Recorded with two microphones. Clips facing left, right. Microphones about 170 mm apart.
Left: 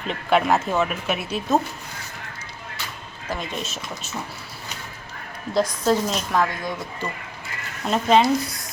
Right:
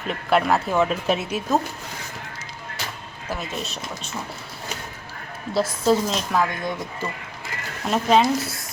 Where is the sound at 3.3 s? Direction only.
5° right (ahead or behind).